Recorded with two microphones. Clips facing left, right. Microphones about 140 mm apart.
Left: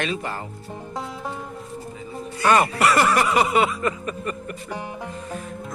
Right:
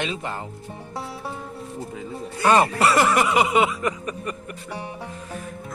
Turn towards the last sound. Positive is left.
turn(degrees=-15)  # may be behind; listen again after turning